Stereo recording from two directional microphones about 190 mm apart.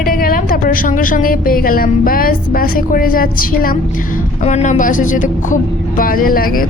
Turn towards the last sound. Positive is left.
turn(degrees=50)  # may be behind; listen again after turning